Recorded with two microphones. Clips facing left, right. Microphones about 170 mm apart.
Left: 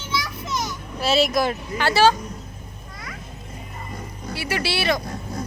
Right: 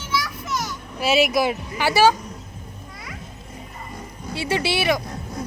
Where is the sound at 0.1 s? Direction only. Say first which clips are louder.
Right 1 dB; 20° left (ahead or behind).